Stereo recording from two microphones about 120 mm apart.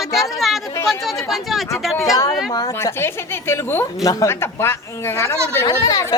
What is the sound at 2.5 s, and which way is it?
Speech, 30° left (ahead or behind).